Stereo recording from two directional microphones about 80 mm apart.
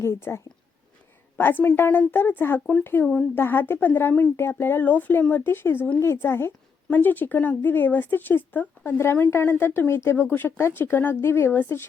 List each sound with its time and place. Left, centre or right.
0.0 s speech: left